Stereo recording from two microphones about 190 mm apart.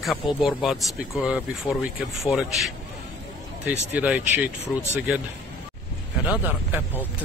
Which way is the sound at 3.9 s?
10° right (ahead or behind).